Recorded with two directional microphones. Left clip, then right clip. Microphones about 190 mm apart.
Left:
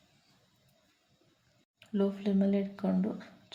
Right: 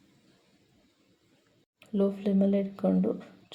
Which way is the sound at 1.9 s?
25° right (ahead or behind).